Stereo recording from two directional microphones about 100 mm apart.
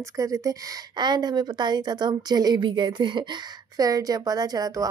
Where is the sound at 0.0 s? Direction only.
35° right (ahead or behind).